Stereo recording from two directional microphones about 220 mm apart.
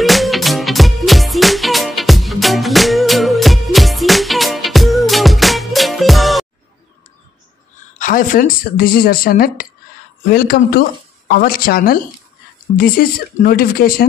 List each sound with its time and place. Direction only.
0.0 s music: centre (ahead or behind)
8.0 s speech: 40° left (ahead or behind)